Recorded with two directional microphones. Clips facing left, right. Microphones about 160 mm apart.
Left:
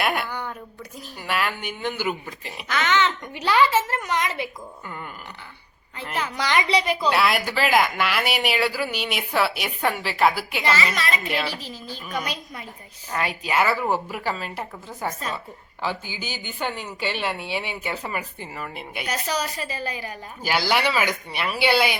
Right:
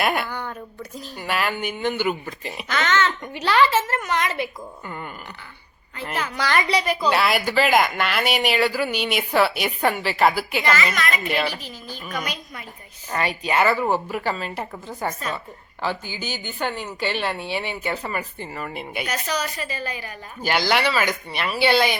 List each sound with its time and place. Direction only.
0.0 s speech: centre (ahead or behind)
0.3 s a sound: 10° left (ahead or behind)
0.9 s speech: centre (ahead or behind)
6.1 s a woman's voice: 20° left (ahead or behind)
7.0 s speech: centre (ahead or behind)
10.9 s a woman's voice: 30° left (ahead or behind)
12.2 s a woman's voice: 30° left (ahead or behind)
13.1 s speech: 5° left (ahead or behind)
15.8 s speech: 15° left (ahead or behind)
19.0 s a woman's voice: 30° left (ahead or behind)
20.4 s speech: 5° left (ahead or behind)